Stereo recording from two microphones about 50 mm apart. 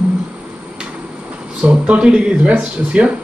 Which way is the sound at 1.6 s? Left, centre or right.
Right.